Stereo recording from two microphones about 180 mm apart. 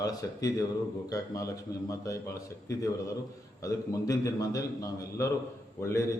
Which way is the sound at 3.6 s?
20° left (ahead or behind).